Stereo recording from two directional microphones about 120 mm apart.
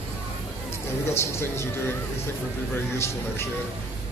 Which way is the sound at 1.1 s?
20° left (ahead or behind).